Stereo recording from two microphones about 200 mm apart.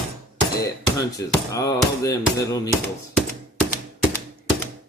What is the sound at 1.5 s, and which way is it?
Music, 15° left (ahead or behind).